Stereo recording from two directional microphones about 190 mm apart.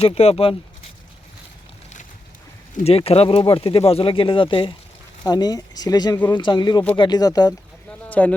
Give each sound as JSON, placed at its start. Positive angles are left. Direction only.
{"t": 0.0, "sound": "speech", "side_deg": 35}
{"t": 2.8, "sound": "speech", "side_deg": 30}
{"t": 8.0, "sound": "a sound", "side_deg": 10}